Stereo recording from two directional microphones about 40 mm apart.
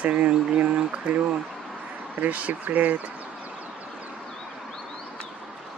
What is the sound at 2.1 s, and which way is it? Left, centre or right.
Speech, right.